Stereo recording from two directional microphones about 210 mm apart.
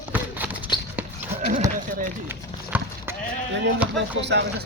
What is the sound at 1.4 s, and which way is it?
Clip-clop, 35° right (ahead or behind).